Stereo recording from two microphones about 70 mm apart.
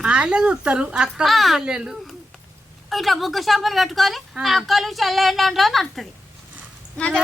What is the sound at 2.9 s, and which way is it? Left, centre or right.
A woman's voice, centre.